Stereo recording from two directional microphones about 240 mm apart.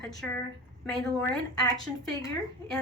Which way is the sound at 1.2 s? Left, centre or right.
Centre.